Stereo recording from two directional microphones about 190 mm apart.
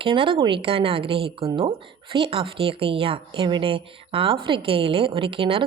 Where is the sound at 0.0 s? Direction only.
25° right (ahead or behind).